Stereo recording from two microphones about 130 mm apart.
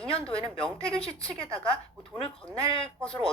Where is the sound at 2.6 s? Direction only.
45° left (ahead or behind).